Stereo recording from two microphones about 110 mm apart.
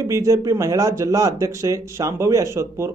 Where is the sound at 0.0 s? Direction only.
30° right (ahead or behind).